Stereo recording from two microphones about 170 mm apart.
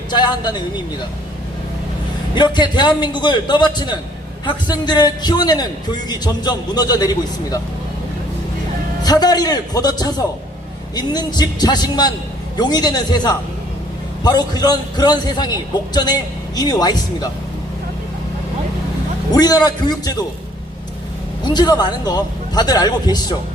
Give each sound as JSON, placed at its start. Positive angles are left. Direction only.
{"t": 0.1, "sound": "a man's voice", "side_deg": 25}
{"t": 2.3, "sound": "a man's voice", "side_deg": 25}
{"t": 9.0, "sound": "a man's voice", "side_deg": 25}
{"t": 19.3, "sound": "a man's voice", "side_deg": 25}
{"t": 21.4, "sound": "a man's voice", "side_deg": 25}